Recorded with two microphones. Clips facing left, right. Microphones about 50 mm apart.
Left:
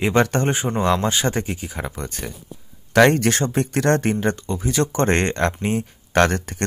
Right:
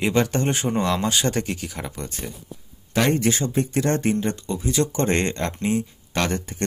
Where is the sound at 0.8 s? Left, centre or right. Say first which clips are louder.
Left 5 dB; left.